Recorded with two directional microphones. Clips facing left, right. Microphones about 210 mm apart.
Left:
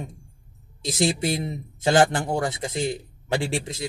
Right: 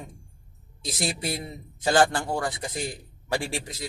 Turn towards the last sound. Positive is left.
turn(degrees=25)  # may be behind; listen again after turning